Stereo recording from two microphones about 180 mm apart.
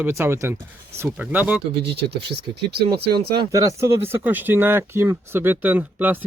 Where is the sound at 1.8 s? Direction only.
65° right (ahead or behind).